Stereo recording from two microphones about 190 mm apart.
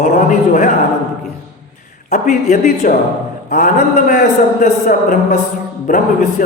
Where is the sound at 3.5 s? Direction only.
45° left (ahead or behind).